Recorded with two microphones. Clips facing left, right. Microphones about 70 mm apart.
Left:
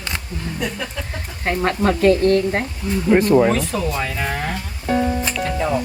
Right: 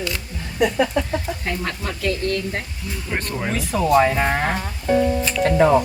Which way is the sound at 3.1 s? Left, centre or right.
Centre.